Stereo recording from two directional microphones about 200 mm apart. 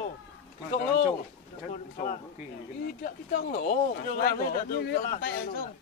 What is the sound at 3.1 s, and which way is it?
A man's voice, 45° left (ahead or behind).